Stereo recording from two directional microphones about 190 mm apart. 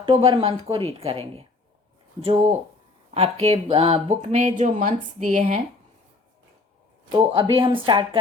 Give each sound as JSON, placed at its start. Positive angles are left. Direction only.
{"t": 0.0, "sound": "speech", "side_deg": -30}
{"t": 7.1, "sound": "speech", "side_deg": -25}